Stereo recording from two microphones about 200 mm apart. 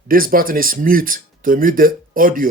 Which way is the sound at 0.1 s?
45° right (ahead or behind).